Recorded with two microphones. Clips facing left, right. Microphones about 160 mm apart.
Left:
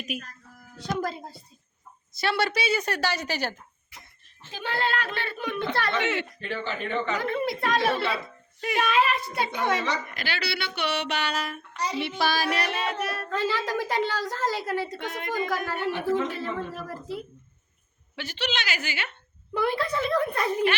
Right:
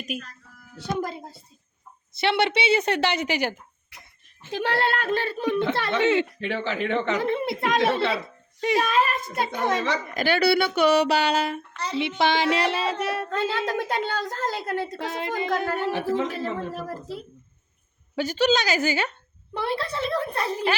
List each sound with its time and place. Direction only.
2.2 s speech: 25° right (ahead or behind)
4.5 s speech: 75° right (ahead or behind); by 6.1 s 25° right (ahead or behind)
6.4 s speech: 80° right
7.2 s speech: 25° right (ahead or behind)
11.7 s speech: 15° left (ahead or behind)
11.9 s speech: 20° right (ahead or behind)
13.3 s a woman's voice: 65° right (ahead or behind)
14.8 s speech: 30° right (ahead or behind)
15.7 s speech: 40° right (ahead or behind)
18.2 s speech: 45° right (ahead or behind)